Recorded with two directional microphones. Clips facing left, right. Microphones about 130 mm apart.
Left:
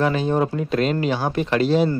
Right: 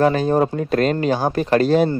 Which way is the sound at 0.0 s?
40° right (ahead or behind).